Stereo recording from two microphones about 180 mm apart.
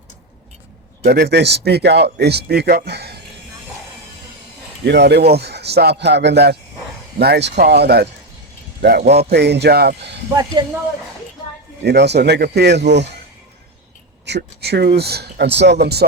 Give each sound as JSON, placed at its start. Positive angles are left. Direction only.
{"t": 1.0, "sound": "speech", "side_deg": -60}
{"t": 4.9, "sound": "speech", "side_deg": -70}
{"t": 11.8, "sound": "speech", "side_deg": -70}
{"t": 14.3, "sound": "speech", "side_deg": -65}